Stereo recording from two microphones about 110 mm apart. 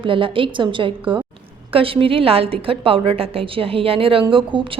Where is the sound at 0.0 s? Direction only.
50° right (ahead or behind).